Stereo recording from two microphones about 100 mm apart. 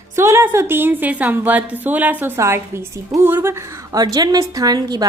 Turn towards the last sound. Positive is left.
turn(degrees=-45)  # may be behind; listen again after turning